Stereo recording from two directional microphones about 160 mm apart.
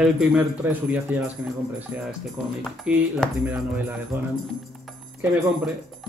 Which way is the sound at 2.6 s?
Centre (ahead or behind).